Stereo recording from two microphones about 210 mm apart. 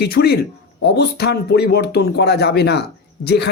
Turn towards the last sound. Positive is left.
turn(degrees=50)  # may be behind; listen again after turning